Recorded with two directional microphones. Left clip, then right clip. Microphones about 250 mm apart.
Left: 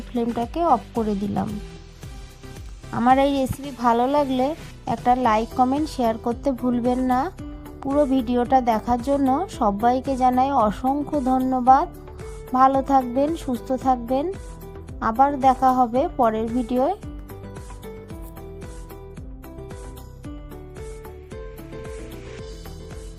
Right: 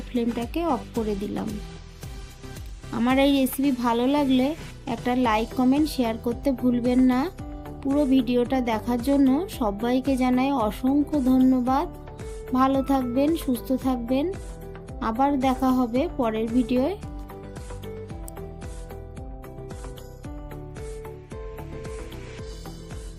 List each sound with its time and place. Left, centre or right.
0.3 s speech: left
2.9 s speech: left